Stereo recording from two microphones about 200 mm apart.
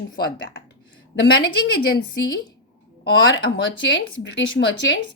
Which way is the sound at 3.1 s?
70° left (ahead or behind).